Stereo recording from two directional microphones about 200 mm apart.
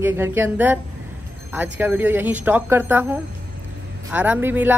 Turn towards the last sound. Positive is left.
turn(degrees=-10)  # may be behind; listen again after turning